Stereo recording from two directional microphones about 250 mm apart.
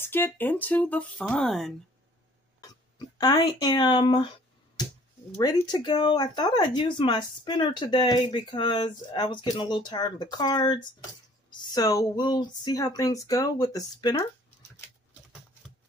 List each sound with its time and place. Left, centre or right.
0.0 s speech: centre
3.2 s speech: centre
5.4 s speech: centre